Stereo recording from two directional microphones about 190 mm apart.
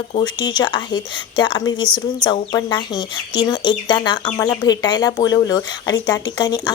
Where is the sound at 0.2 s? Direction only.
20° left (ahead or behind).